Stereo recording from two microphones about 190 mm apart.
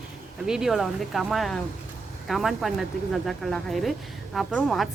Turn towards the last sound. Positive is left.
turn(degrees=0)  # may be behind; listen again after turning